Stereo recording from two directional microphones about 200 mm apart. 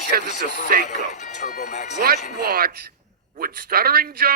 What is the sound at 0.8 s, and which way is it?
Speech, 35° left (ahead or behind).